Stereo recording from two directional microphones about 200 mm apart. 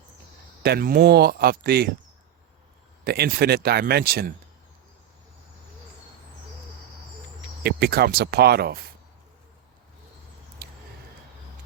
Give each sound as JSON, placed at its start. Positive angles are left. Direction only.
{"t": 0.6, "sound": "speech", "side_deg": -50}
{"t": 3.0, "sound": "speech", "side_deg": -50}
{"t": 7.6, "sound": "speech", "side_deg": -50}
{"t": 10.6, "sound": "a sound", "side_deg": -50}